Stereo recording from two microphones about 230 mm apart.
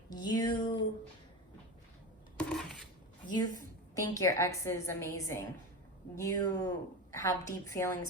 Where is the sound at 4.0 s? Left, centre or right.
Centre.